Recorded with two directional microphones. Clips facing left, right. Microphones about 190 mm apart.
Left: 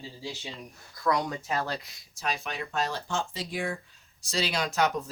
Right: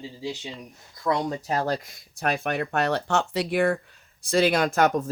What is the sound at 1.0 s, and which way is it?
Speech, 30° right (ahead or behind).